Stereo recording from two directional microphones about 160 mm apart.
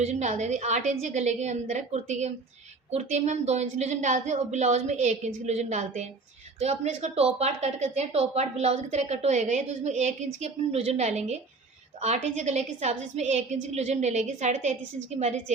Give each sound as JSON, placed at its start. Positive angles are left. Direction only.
{"t": 0.0, "sound": "a woman's voice", "side_deg": -45}